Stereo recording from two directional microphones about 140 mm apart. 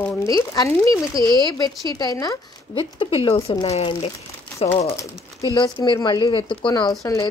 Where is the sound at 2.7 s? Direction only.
40° left (ahead or behind).